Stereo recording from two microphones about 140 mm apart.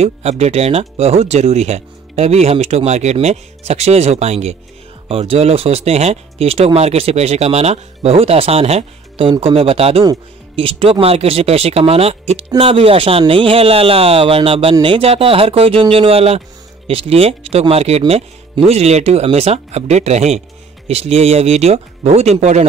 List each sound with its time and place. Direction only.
0.0 s speech: 45° right (ahead or behind)